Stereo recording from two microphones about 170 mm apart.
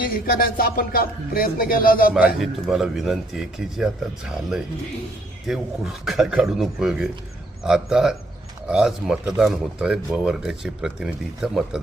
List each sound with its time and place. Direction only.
0.0 s speech: 60° left (ahead or behind)
2.4 s speech: centre (ahead or behind)
5.5 s speech: centre (ahead or behind)